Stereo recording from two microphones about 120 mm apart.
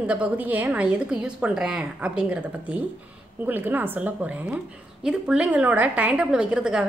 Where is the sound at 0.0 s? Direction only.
10° right (ahead or behind).